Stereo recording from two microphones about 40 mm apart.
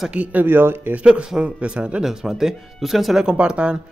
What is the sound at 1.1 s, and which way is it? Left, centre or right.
Speech, right.